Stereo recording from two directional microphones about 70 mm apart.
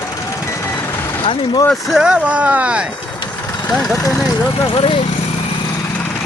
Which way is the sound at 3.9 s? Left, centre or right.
Left.